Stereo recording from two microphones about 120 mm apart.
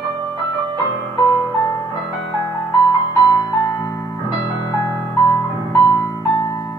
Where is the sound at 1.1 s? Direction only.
30° left (ahead or behind).